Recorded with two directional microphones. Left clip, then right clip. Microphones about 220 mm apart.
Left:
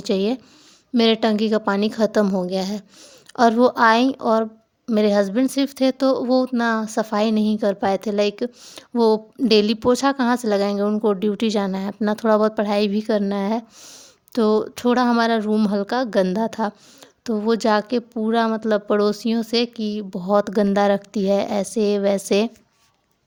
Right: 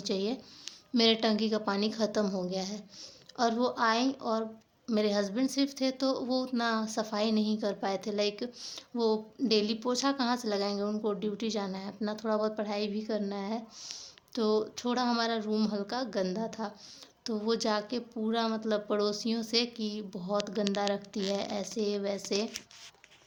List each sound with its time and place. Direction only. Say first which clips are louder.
0.1 s a woman's voice: left 12 dB; 40° left (ahead or behind)